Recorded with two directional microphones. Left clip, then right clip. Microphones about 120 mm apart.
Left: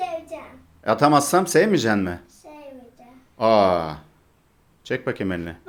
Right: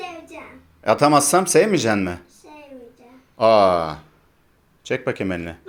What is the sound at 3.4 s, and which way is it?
Speech, centre (ahead or behind).